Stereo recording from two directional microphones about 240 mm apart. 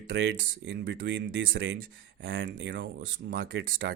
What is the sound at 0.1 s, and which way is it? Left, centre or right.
Speech, right.